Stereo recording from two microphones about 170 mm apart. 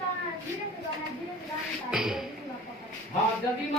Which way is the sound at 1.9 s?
5° right (ahead or behind).